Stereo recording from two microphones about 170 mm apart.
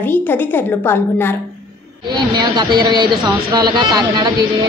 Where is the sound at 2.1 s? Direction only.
25° right (ahead or behind).